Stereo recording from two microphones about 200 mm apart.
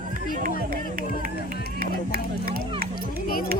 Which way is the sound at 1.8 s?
45° right (ahead or behind).